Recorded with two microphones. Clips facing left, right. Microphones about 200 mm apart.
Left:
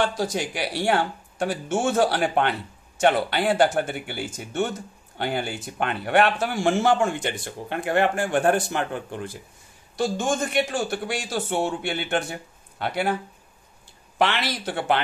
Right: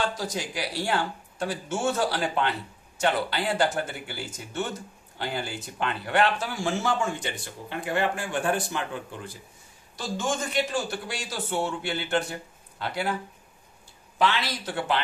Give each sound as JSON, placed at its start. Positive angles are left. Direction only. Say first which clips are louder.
{"t": 0.0, "sound": "a man's voice", "louder": "left 5 dB", "side_deg": 60}
{"t": 14.1, "sound": "speech", "louder": "left 2 dB", "side_deg": 65}